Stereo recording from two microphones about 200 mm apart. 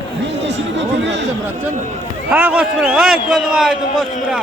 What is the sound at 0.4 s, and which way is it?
Speech, 60° right (ahead or behind).